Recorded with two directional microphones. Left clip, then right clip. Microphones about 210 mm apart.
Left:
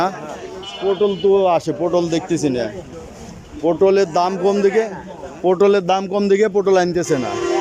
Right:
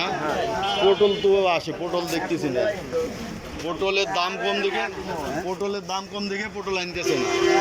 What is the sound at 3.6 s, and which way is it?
Speech, 35° left (ahead or behind).